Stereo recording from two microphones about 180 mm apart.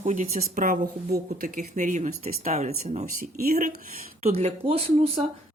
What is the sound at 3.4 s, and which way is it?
Speech, 55° right (ahead or behind).